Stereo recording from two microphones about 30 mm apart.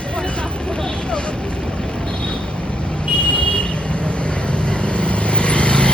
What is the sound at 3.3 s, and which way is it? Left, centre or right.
Vehicle, left.